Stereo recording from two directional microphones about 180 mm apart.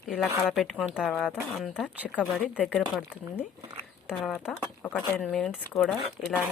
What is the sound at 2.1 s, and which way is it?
Speech, 10° left (ahead or behind).